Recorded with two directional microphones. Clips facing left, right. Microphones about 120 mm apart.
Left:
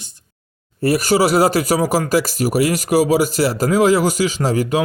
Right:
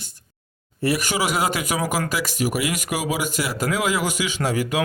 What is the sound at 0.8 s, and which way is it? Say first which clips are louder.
Speech: left 7 dB; 40° left (ahead or behind).